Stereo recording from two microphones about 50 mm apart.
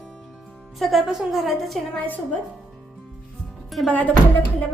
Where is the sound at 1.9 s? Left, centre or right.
Left.